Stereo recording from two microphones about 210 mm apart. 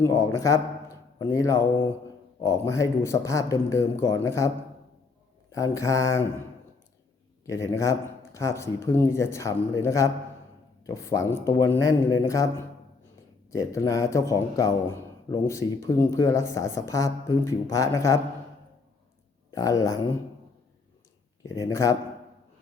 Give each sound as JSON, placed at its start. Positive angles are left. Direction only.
{"t": 0.0, "sound": "a man's voice", "side_deg": 15}
{"t": 7.4, "sound": "speech", "side_deg": 15}
{"t": 19.5, "sound": "speech", "side_deg": 15}
{"t": 21.4, "sound": "speech", "side_deg": 15}